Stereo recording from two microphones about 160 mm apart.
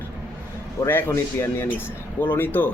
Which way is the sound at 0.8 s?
15° left (ahead or behind).